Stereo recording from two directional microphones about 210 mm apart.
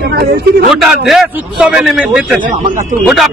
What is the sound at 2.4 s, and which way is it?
Speech, 40° right (ahead or behind).